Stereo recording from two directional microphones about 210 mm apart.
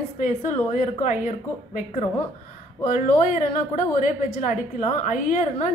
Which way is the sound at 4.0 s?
35° left (ahead or behind).